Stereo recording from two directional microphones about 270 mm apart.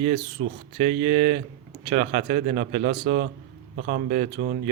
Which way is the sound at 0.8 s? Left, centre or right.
Right.